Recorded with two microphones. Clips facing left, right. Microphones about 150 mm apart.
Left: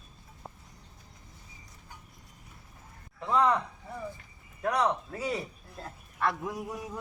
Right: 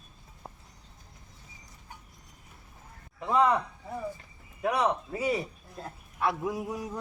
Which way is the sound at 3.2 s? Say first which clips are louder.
Right 1 dB; 10° right (ahead or behind).